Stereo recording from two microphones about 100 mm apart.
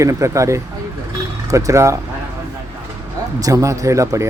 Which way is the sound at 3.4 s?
35° right (ahead or behind).